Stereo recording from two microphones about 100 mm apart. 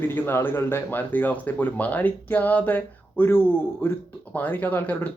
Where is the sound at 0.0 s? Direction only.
20° left (ahead or behind).